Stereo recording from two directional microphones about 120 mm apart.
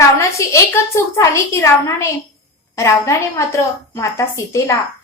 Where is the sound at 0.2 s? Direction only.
25° left (ahead or behind).